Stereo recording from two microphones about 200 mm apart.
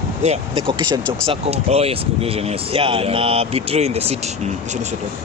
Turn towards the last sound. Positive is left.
turn(degrees=-30)  # may be behind; listen again after turning